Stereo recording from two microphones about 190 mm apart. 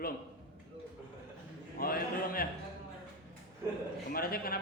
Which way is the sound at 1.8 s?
50° left (ahead or behind).